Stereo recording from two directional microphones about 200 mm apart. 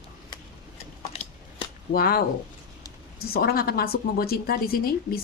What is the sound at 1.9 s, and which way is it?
Speech, 50° left (ahead or behind).